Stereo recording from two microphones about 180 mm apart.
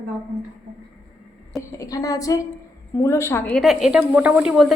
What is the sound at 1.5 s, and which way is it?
A woman's voice, 20° left (ahead or behind).